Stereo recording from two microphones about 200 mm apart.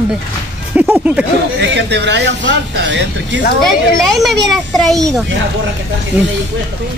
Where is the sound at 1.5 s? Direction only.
60° right (ahead or behind).